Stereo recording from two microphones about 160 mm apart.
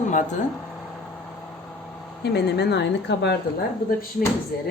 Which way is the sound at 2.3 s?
90° left.